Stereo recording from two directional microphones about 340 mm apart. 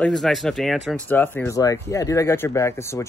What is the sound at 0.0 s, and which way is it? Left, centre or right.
Speech, centre.